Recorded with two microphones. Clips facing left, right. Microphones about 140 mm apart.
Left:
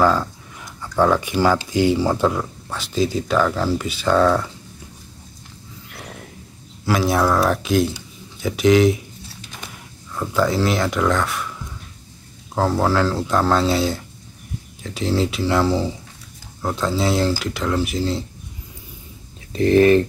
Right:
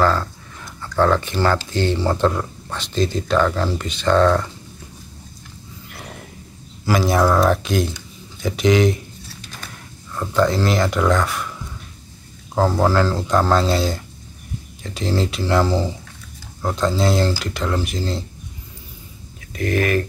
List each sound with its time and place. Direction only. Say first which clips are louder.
0.0 s speech: left 1 dB; 10° left (ahead or behind)
5.9 s a sound: even; centre (ahead or behind)
6.9 s speech: right 1 dB; centre (ahead or behind)
10.1 s speech: right 1 dB; 5° left (ahead or behind)
12.5 s speech: right 1 dB; centre (ahead or behind)
19.5 s speech: left 7 dB; 30° left (ahead or behind)